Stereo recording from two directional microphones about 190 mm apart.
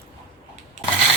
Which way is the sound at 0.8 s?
40° right (ahead or behind).